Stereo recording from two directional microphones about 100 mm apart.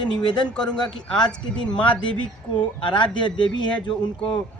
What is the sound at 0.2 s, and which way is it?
Speech, 55° left (ahead or behind).